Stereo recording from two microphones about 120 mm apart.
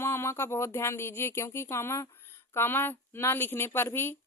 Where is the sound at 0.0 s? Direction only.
20° left (ahead or behind).